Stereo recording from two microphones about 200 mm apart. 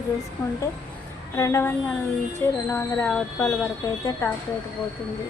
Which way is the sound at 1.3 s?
15° left (ahead or behind).